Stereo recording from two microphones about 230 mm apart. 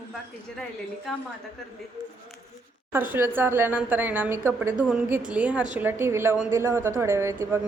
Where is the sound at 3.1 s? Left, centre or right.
Centre.